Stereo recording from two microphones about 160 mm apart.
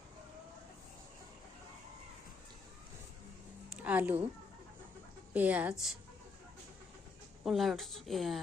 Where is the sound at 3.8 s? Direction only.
10° right (ahead or behind).